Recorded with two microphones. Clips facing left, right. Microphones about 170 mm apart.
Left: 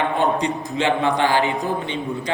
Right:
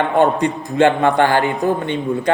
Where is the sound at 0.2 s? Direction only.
55° right (ahead or behind).